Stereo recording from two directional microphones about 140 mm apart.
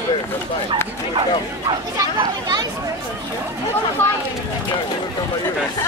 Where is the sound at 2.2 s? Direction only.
30° right (ahead or behind).